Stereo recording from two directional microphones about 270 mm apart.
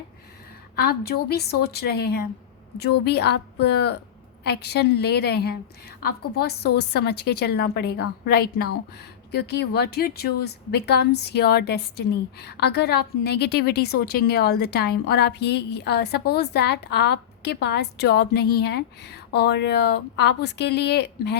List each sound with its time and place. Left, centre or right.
0.8 s a woman's voice: left